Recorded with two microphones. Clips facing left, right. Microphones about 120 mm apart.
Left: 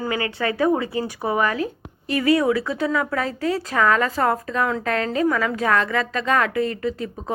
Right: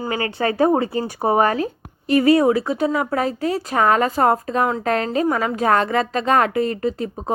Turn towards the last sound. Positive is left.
turn(degrees=-30)  # may be behind; listen again after turning